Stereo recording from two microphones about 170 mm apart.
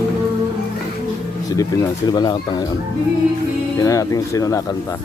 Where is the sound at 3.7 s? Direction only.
20° left (ahead or behind).